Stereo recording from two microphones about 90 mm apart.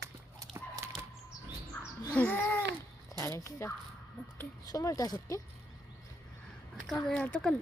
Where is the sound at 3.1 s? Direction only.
35° left (ahead or behind).